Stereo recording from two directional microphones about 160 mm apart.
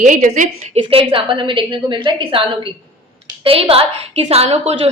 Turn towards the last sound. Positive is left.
turn(degrees=-40)  # may be behind; listen again after turning